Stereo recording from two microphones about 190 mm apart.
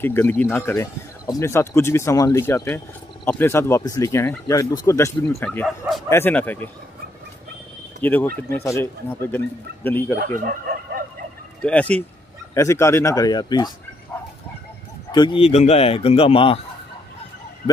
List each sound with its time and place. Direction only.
0.0 s speech: 10° left (ahead or behind)
8.0 s speech: 10° left (ahead or behind)
10.4 s chicken: 50° right (ahead or behind)
11.6 s speech: 5° left (ahead or behind)
15.0 s speech: 25° left (ahead or behind)